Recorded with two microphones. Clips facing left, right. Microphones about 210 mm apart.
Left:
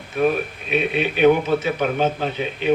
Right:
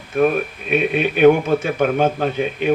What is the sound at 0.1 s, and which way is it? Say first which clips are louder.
Speech: right 3 dB; 50° right (ahead or behind).